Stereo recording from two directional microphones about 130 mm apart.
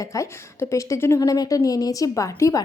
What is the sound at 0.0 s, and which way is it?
A woman's voice, 25° left (ahead or behind).